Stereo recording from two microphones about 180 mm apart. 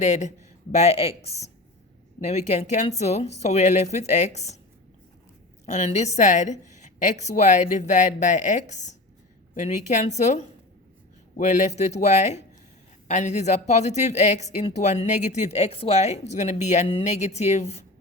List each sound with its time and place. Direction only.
0.0 s speech: 40° left (ahead or behind)
5.6 s speech: 40° left (ahead or behind)